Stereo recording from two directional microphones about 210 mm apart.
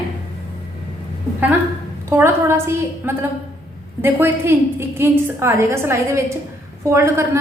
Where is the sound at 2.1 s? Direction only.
10° right (ahead or behind).